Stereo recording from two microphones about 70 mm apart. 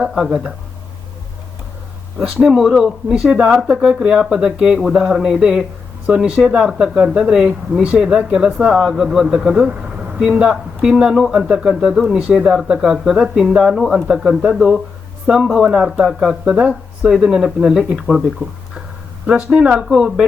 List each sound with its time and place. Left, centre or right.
0.0 s speech: centre
2.1 s speech: centre
17.1 s speech: centre
19.3 s speech: centre